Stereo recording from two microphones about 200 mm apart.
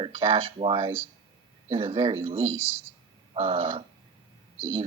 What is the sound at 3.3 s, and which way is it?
Speech, 25° right (ahead or behind).